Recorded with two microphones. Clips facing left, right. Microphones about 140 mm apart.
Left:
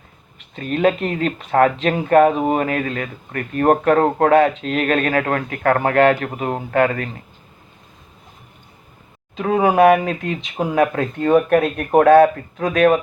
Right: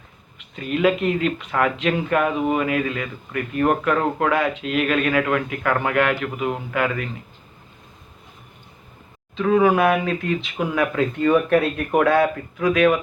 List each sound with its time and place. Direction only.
0.5 s speech: 35° left (ahead or behind)
9.3 s speech: 35° left (ahead or behind)